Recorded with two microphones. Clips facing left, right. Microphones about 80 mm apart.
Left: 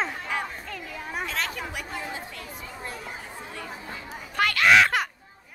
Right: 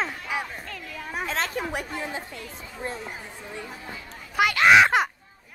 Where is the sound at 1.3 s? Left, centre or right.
Right.